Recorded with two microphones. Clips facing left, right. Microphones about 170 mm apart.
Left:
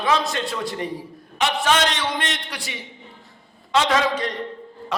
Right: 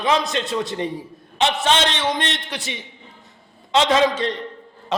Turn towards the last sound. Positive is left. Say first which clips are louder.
# right 3 dB
turn(degrees=-25)  # may be behind; listen again after turning